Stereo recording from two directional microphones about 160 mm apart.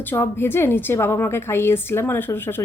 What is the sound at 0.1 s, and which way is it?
A woman's voice, 15° left (ahead or behind).